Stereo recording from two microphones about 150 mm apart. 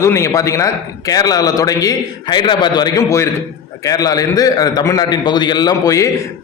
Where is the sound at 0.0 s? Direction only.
20° left (ahead or behind).